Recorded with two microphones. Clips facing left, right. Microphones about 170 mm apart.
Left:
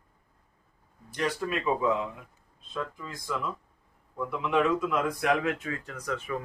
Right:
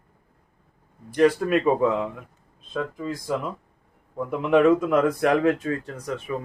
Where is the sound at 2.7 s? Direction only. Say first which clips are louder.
Right 7 dB; 50° right (ahead or behind).